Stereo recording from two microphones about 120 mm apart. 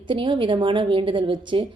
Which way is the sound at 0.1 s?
45° right (ahead or behind).